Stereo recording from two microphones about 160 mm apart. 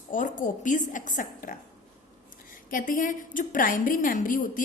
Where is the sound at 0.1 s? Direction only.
55° left (ahead or behind).